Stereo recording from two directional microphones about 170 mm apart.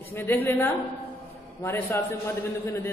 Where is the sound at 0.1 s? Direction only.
15° left (ahead or behind).